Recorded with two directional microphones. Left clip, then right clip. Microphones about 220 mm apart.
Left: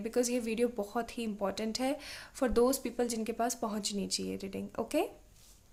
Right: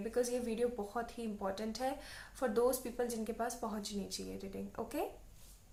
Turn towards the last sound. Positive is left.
turn(degrees=45)  # may be behind; listen again after turning